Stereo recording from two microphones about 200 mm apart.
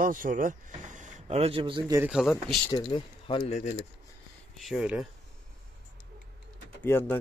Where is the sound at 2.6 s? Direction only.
25° left (ahead or behind).